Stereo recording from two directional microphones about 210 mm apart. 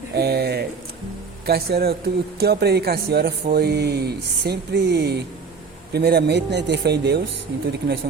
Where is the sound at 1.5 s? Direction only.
50° right (ahead or behind).